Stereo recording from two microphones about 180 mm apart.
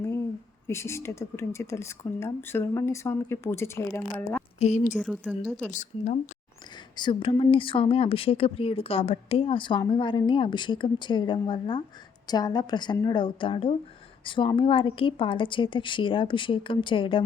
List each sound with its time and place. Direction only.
0.7 s speech: 15° left (ahead or behind)
4.6 s a woman's voice: 40° left (ahead or behind)
4.9 s a woman's voice: 5° left (ahead or behind)
5.7 s speech: 45° left (ahead or behind)
6.9 s a woman's voice: 25° left (ahead or behind)